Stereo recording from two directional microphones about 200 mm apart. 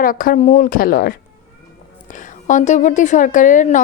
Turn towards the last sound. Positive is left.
turn(degrees=40)  # may be behind; listen again after turning